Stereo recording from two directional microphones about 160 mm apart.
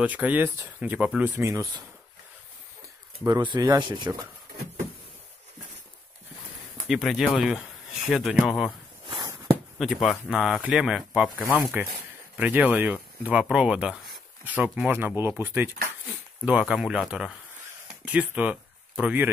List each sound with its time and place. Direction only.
0.0 s speech: 10° right (ahead or behind)
3.3 s speech: 25° right (ahead or behind)
6.9 s speech: centre (ahead or behind)
9.0 s walk: 30° right (ahead or behind)
9.8 s speech: centre (ahead or behind)
12.4 s speech: 10° right (ahead or behind)